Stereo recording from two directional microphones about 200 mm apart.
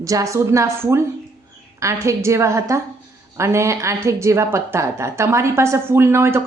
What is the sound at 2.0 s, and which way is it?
A woman's voice, 15° right (ahead or behind).